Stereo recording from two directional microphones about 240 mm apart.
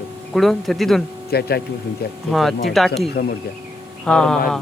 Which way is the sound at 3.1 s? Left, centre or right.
Left.